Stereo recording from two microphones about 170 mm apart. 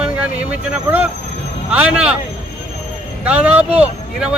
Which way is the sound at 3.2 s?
10° right (ahead or behind).